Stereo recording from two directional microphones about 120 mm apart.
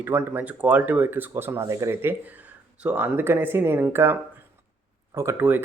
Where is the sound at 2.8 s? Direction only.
15° right (ahead or behind).